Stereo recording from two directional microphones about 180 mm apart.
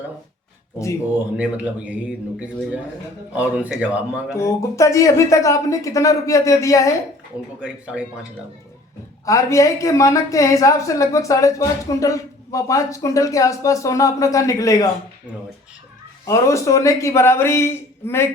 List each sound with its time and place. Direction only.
1.4 s speech: 5° right (ahead or behind)
3.3 s speech: 10° right (ahead or behind)
4.4 s a woman's voice: 15° left (ahead or behind)
7.6 s a man's voice: 5° right (ahead or behind)
9.2 s a woman's voice: 15° left (ahead or behind)
16.2 s a woman's voice: 15° left (ahead or behind)